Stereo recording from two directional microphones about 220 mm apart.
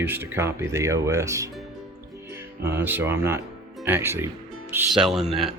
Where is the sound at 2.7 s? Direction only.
10° right (ahead or behind).